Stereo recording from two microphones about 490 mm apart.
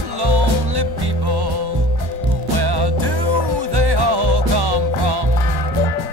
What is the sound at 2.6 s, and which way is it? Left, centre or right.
Music, right.